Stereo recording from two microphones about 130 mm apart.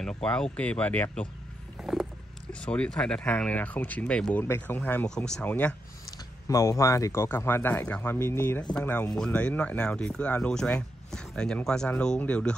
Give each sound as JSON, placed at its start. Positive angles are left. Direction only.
{"t": 0.0, "sound": "speech", "side_deg": 5}
{"t": 1.8, "sound": "a sound", "side_deg": 0}
{"t": 2.6, "sound": "speech", "side_deg": 10}
{"t": 6.4, "sound": "speech", "side_deg": 25}